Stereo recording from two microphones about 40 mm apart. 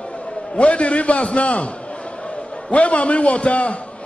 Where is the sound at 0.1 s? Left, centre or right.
Left.